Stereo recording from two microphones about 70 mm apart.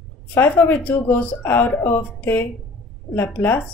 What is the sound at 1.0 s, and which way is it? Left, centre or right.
Speech, left.